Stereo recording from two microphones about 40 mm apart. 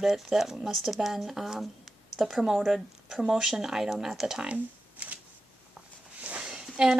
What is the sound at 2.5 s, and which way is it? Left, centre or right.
Speech, centre.